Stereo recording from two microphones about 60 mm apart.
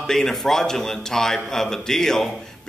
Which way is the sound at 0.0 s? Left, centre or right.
Centre.